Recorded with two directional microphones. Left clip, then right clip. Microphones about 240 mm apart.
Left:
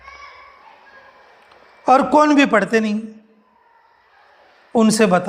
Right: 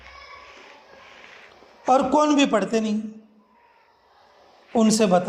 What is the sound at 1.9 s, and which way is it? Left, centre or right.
Speech, left.